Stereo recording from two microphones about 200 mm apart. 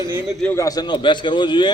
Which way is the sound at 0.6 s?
20° left (ahead or behind).